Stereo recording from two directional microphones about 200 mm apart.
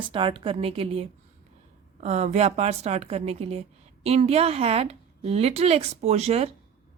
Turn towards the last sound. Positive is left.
turn(degrees=-30)  # may be behind; listen again after turning